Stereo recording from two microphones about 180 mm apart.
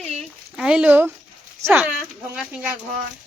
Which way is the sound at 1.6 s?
15° right (ahead or behind).